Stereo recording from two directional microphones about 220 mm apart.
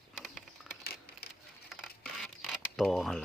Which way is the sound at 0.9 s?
45° left (ahead or behind).